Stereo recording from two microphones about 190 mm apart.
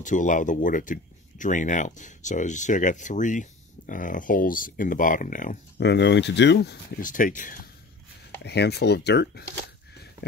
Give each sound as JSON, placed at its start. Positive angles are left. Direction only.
{"t": 0.0, "sound": "speech", "side_deg": 40}
{"t": 5.8, "sound": "speech", "side_deg": 65}
{"t": 7.0, "sound": "speech", "side_deg": 45}
{"t": 8.5, "sound": "speech", "side_deg": 60}